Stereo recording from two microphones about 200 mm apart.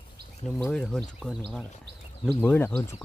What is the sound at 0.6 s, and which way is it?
Speech, 5° left (ahead or behind).